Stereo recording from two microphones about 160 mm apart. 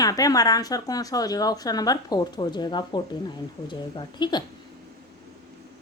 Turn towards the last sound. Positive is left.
turn(degrees=25)  # may be behind; listen again after turning